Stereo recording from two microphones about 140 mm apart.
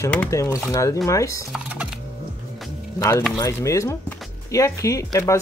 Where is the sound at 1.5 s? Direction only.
10° right (ahead or behind).